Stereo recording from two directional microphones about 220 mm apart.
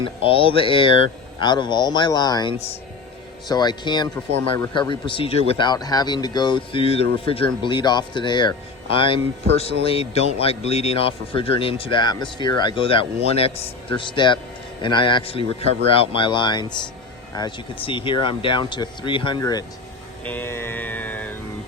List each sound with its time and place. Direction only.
0.0 s a man's voice: 25° left (ahead or behind)
20.2 s music: 10° left (ahead or behind)